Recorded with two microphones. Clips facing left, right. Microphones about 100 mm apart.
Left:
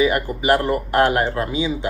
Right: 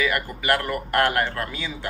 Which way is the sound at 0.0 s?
25° left (ahead or behind).